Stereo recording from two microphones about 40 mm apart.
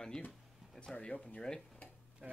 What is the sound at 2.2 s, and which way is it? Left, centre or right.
Speech, right.